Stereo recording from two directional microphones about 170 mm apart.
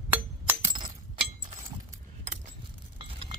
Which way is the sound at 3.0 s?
30° right (ahead or behind).